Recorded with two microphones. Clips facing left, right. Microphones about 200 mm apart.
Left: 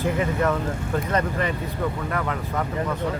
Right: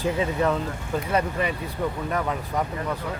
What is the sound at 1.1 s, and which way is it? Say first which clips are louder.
Speech: right 1 dB; 10° right (ahead or behind).